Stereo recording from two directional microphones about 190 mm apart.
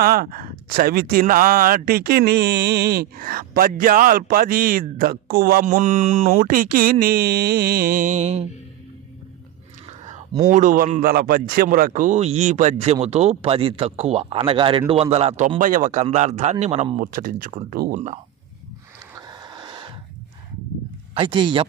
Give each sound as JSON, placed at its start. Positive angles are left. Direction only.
{"t": 0.0, "sound": "speech", "side_deg": -50}
{"t": 6.4, "sound": "speech", "side_deg": -50}
{"t": 10.5, "sound": "speech", "side_deg": -45}
{"t": 17.0, "sound": "speech", "side_deg": -45}
{"t": 19.1, "sound": "a sound", "side_deg": -20}
{"t": 21.2, "sound": "speech", "side_deg": -25}